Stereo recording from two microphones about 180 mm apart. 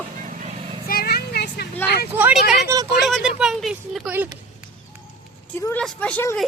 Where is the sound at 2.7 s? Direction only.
15° right (ahead or behind).